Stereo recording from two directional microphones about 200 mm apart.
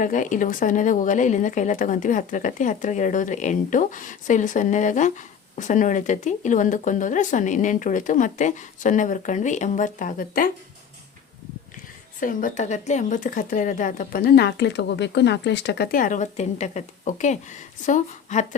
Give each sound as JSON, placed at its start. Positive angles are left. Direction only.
{"t": 0.0, "sound": "speech", "side_deg": 40}
{"t": 12.2, "sound": "speech", "side_deg": 40}